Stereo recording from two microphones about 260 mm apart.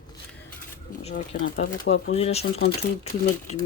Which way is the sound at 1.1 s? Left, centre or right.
Left.